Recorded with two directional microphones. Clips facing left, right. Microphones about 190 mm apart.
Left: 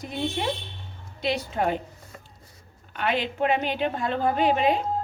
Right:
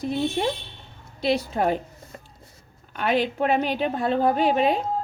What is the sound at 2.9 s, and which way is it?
A woman's voice, 40° right (ahead or behind).